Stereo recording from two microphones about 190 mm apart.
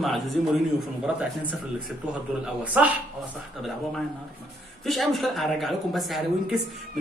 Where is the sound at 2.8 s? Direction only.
10° right (ahead or behind).